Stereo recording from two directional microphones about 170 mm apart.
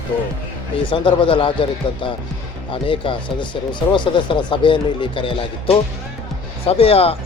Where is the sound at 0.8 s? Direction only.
30° left (ahead or behind).